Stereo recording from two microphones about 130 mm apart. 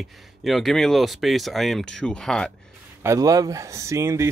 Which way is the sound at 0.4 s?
Centre (ahead or behind).